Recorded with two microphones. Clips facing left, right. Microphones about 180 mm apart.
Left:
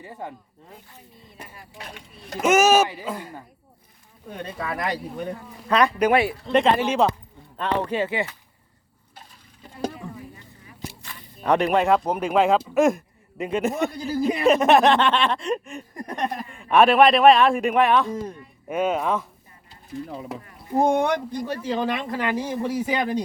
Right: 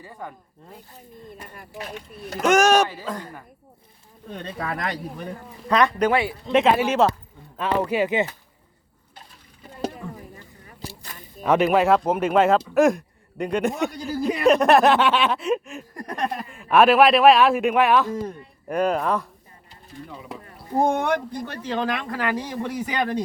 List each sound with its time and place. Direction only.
0.0 s speech: 25° left (ahead or behind)
2.4 s speech: 5° left (ahead or behind)
4.5 s speech: centre (ahead or behind)
5.6 s speech: 10° left (ahead or behind)
6.5 s speech: 5° right (ahead or behind)
10.8 s a sound: 35° right (ahead or behind)
11.3 s speech: centre (ahead or behind)
20.8 s speech: 10° left (ahead or behind)
22.1 s speech: 20° left (ahead or behind)
22.4 s speech: 5° left (ahead or behind)